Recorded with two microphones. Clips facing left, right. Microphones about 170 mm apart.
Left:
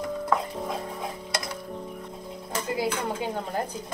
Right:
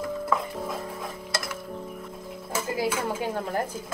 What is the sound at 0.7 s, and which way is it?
Music, 25° left (ahead or behind).